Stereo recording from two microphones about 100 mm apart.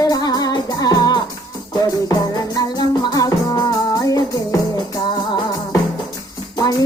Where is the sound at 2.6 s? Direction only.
45° left (ahead or behind).